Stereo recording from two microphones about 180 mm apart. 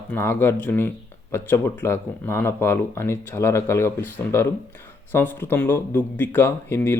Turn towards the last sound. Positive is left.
turn(degrees=15)  # may be behind; listen again after turning